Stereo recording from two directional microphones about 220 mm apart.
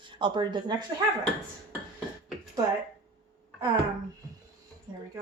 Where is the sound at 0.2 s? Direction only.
20° right (ahead or behind).